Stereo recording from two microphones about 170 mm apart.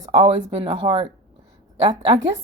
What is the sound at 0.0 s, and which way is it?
Speech, 35° right (ahead or behind).